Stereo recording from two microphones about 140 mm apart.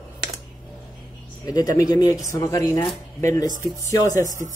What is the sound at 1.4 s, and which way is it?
Speech, 25° left (ahead or behind).